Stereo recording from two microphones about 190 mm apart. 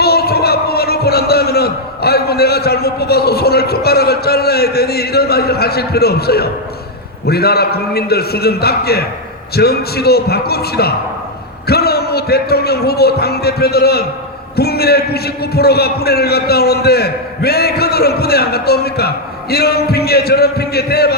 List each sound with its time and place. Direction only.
0.0 s a man's voice: 55° left (ahead or behind)